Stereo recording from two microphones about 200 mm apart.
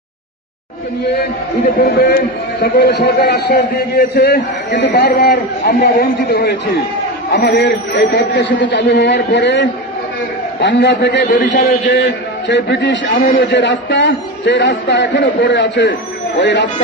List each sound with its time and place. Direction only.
1.6 s a man's voice: 50° left (ahead or behind)